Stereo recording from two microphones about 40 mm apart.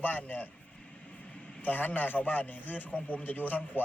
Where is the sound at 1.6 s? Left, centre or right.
Left.